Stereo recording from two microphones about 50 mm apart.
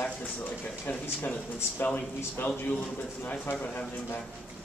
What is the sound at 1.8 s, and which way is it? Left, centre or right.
Speech, left.